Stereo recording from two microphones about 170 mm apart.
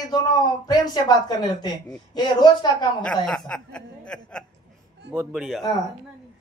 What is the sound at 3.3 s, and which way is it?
Speech, 5° left (ahead or behind).